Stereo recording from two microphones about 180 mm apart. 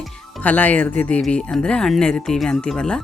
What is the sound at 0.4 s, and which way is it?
Speech, 10° left (ahead or behind).